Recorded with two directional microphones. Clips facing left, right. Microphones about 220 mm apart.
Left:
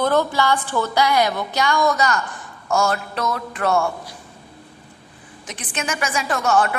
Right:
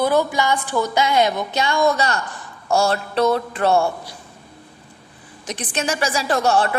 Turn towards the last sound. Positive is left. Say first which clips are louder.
# right 1 dB
turn(degrees=-30)  # may be behind; listen again after turning